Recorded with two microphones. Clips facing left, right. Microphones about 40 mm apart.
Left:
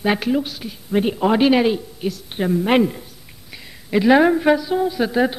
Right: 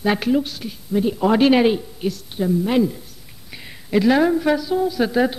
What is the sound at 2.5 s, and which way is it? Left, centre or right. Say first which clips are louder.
Speech: left 2 dB; left.